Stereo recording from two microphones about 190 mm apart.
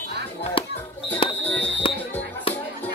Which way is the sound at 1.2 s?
30° left (ahead or behind).